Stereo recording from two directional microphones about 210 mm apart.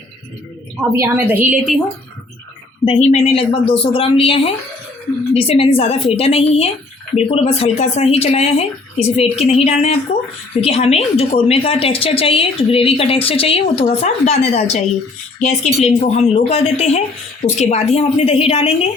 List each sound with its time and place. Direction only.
0.8 s a woman's voice: 15° right (ahead or behind)
2.8 s a woman's voice: 30° left (ahead or behind)